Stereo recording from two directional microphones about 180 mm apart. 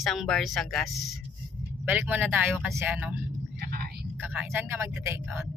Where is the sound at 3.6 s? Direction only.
55° right (ahead or behind).